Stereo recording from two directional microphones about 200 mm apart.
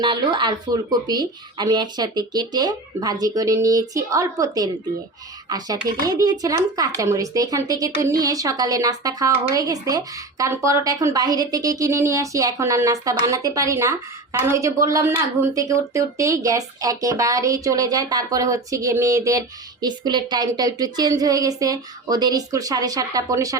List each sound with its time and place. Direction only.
0.0 s speech: 25° right (ahead or behind)